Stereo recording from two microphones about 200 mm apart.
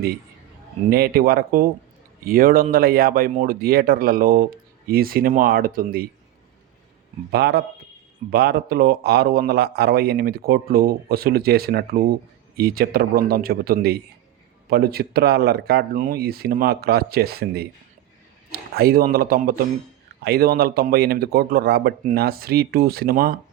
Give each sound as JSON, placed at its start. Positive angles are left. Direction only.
{"t": 0.9, "sound": "a man's voice", "side_deg": -50}
{"t": 7.3, "sound": "a man's voice", "side_deg": -50}
{"t": 18.7, "sound": "a man's voice", "side_deg": -50}